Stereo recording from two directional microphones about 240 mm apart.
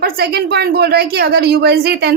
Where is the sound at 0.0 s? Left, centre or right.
Right.